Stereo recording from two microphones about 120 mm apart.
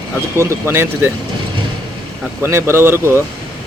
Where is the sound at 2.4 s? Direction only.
20° right (ahead or behind).